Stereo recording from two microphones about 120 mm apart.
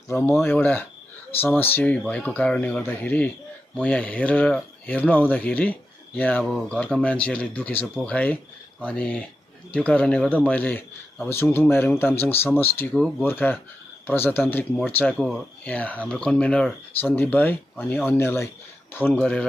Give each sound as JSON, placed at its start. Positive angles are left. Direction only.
{"t": 0.1, "sound": "speech", "side_deg": 20}
{"t": 15.1, "sound": "speech", "side_deg": -5}
{"t": 15.6, "sound": "speech", "side_deg": 10}
{"t": 19.1, "sound": "speech", "side_deg": 5}